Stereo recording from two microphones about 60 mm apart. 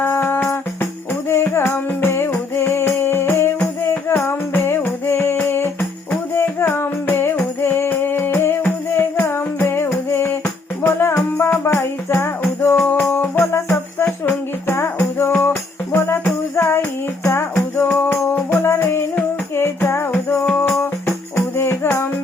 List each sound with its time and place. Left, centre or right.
0.0 s music: left
10.4 s music: left
11.2 s music: left
21.3 s music: left